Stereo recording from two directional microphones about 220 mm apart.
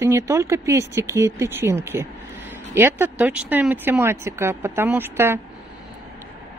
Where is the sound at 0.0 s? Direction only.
10° right (ahead or behind).